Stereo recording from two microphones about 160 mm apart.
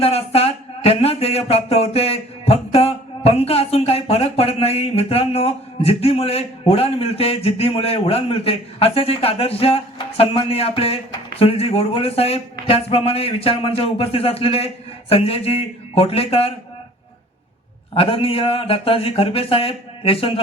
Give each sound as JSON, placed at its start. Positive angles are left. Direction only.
{"t": 0.0, "sound": "speech", "side_deg": 40}
{"t": 17.9, "sound": "speech", "side_deg": 35}